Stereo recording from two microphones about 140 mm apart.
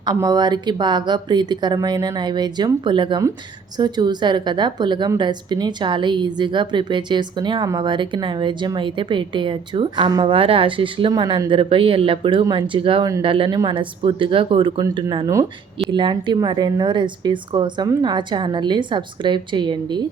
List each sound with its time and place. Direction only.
0.0 s a woman's voice: 25° right (ahead or behind)